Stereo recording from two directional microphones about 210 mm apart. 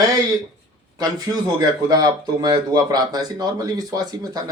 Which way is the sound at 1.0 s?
20° right (ahead or behind).